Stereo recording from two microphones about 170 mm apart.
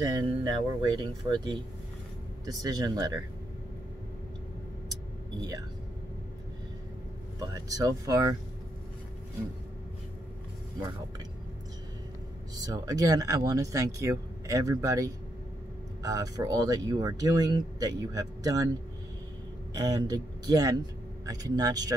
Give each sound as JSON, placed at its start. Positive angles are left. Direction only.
{"t": 0.0, "sound": "speech", "side_deg": -25}
{"t": 5.4, "sound": "speech", "side_deg": -20}
{"t": 7.3, "sound": "speech", "side_deg": -20}
{"t": 12.5, "sound": "speech", "side_deg": -20}
{"t": 19.7, "sound": "speech", "side_deg": -20}